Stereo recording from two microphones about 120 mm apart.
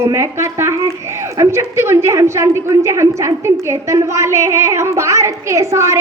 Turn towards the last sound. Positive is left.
turn(degrees=-25)  # may be behind; listen again after turning